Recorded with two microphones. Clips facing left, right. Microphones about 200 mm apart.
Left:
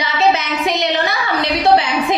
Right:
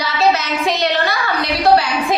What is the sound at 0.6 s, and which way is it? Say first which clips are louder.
A woman's voice: even; 20° left (ahead or behind).